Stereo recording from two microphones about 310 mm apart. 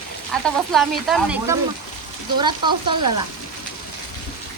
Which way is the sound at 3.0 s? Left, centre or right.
Right.